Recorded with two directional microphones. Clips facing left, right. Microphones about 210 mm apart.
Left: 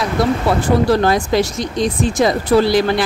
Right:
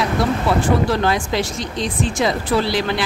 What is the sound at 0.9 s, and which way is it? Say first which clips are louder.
Speech: left 5 dB; 40° left (ahead or behind).